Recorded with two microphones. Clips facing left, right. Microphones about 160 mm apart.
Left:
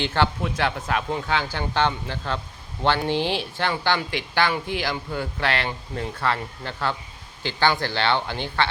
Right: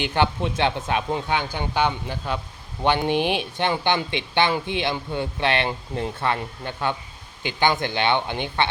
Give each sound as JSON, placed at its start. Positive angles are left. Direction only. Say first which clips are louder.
{"t": 0.0, "sound": "speech", "louder": "right 1 dB", "side_deg": -15}